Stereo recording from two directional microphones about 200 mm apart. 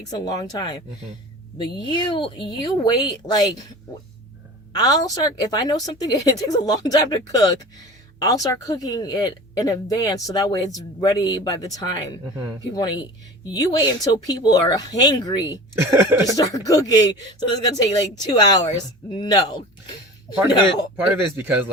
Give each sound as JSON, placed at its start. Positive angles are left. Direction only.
{"t": 0.3, "sound": "a woman's voice", "side_deg": 20}
{"t": 4.7, "sound": "a woman's voice", "side_deg": 20}
{"t": 15.7, "sound": "speech", "side_deg": -15}
{"t": 16.4, "sound": "a woman's voice", "side_deg": 15}
{"t": 20.9, "sound": "speech", "side_deg": -10}